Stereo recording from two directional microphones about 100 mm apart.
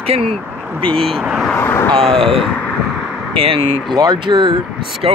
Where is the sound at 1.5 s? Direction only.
25° left (ahead or behind).